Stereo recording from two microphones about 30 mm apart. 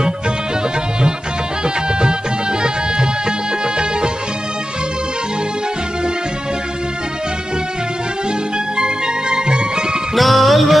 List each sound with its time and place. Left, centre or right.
1.6 s music: right
8.5 s music: right
10.2 s music: centre